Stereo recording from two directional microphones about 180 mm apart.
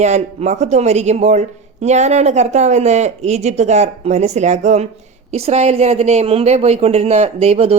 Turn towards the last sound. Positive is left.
turn(degrees=-35)  # may be behind; listen again after turning